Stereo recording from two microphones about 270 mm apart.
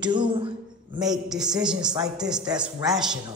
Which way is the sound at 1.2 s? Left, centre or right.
Centre.